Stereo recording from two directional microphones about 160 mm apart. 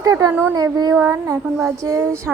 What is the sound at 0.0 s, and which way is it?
A woman's voice, 20° right (ahead or behind).